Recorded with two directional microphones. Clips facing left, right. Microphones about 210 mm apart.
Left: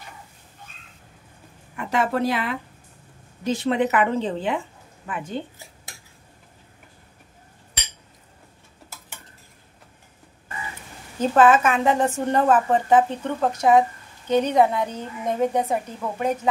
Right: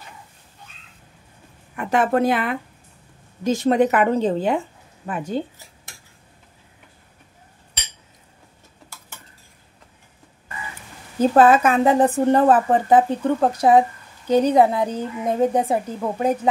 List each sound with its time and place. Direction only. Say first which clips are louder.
1.8 s a woman's voice: right 4 dB; 50° right (ahead or behind)
11.1 s speech: right 3 dB; 35° right (ahead or behind)